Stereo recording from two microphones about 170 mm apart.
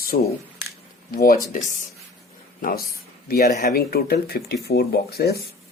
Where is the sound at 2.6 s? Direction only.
55° left (ahead or behind).